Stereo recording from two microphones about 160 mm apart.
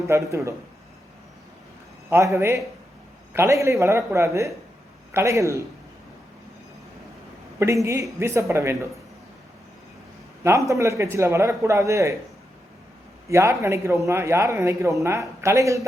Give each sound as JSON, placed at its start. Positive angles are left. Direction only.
{"t": 0.1, "sound": "speech", "side_deg": -20}
{"t": 2.0, "sound": "a man's voice", "side_deg": -15}
{"t": 7.6, "sound": "a man's voice", "side_deg": -20}
{"t": 10.7, "sound": "speech", "side_deg": -20}
{"t": 13.3, "sound": "a man's voice", "side_deg": -15}